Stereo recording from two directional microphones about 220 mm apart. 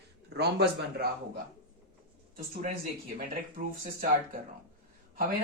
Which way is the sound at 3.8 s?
40° right (ahead or behind).